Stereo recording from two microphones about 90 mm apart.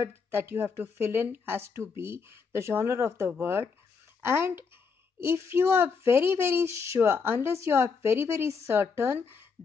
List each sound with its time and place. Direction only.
0.0 s speech: 25° right (ahead or behind)